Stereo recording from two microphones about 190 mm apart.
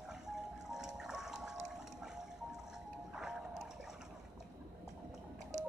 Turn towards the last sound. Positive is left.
turn(degrees=-40)  # may be behind; listen again after turning